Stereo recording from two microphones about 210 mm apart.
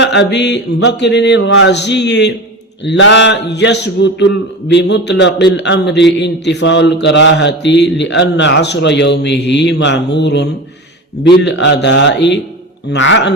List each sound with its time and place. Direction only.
0.0 s mantra: 55° left (ahead or behind)